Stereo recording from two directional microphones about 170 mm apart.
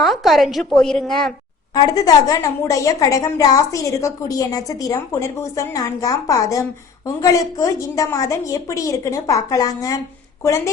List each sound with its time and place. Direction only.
0.0 s a woman's voice: centre (ahead or behind)
1.7 s a woman's voice: 20° left (ahead or behind)